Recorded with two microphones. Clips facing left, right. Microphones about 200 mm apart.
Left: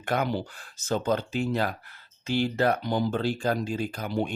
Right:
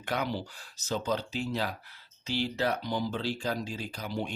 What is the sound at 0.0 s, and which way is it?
Speech, 50° left (ahead or behind).